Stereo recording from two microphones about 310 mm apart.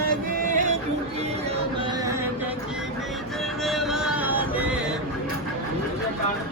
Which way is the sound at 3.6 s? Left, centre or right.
Centre.